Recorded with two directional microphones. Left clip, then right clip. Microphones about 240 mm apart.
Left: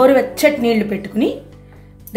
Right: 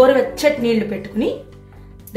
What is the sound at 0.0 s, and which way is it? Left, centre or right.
A woman's voice, left.